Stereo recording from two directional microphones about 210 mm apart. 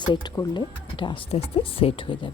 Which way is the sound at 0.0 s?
20° left (ahead or behind).